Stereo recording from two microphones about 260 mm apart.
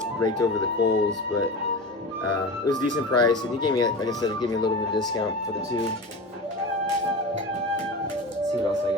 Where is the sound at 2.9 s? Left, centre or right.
Centre.